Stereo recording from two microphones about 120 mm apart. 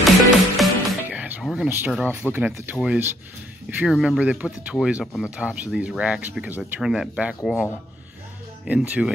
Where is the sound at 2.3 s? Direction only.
15° right (ahead or behind).